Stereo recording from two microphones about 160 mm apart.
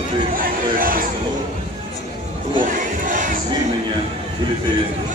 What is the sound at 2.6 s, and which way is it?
Crowd, 55° right (ahead or behind).